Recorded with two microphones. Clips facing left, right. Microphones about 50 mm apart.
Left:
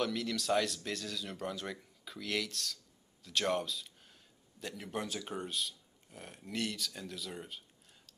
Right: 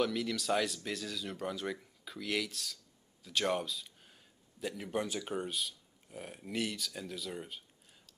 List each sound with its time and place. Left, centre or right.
0.0 s speech: centre